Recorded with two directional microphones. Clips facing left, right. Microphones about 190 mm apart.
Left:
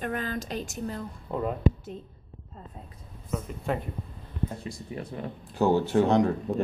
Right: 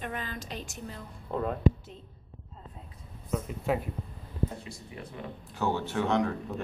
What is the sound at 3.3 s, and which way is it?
Speech, centre (ahead or behind).